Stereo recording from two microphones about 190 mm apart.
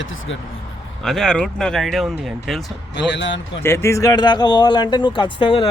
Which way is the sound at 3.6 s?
15° left (ahead or behind).